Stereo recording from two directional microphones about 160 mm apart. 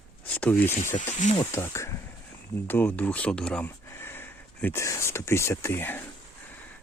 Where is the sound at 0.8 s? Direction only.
50° left (ahead or behind).